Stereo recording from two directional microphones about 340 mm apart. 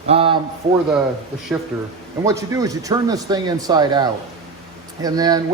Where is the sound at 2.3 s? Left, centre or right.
Centre.